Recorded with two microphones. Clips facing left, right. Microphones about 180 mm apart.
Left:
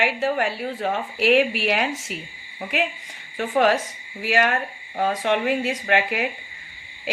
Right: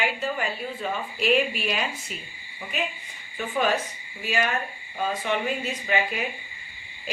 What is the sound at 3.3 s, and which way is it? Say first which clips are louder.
A woman's voice: left 5 dB; 75° left (ahead or behind).